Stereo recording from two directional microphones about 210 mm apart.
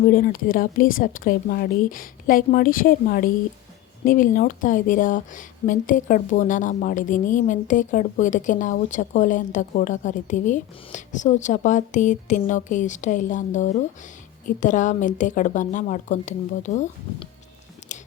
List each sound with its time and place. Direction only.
0.0 s speech: 45° left (ahead or behind)